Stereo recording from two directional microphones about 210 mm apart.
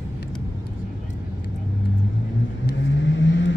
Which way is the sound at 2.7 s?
60° left (ahead or behind).